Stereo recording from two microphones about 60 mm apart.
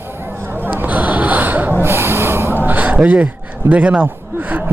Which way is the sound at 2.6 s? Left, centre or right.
Right.